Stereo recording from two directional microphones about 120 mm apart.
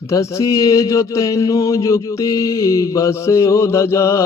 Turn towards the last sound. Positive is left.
turn(degrees=25)  # may be behind; listen again after turning